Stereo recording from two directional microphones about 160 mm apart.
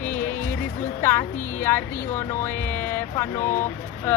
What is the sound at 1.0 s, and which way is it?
Speech, 15° left (ahead or behind).